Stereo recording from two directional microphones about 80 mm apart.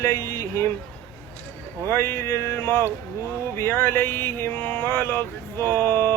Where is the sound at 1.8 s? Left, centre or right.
Left.